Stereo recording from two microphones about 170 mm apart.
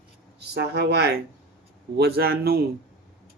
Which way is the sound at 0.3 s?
80° right.